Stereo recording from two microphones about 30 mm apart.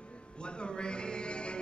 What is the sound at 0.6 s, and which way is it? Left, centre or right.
Music, left.